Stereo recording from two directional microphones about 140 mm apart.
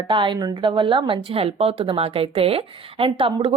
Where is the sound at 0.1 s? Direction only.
35° right (ahead or behind).